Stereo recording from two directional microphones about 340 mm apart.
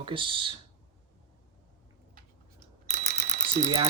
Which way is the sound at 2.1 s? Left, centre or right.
Right.